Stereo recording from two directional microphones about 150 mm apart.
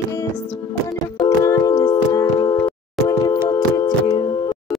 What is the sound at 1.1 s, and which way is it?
Music, 20° left (ahead or behind).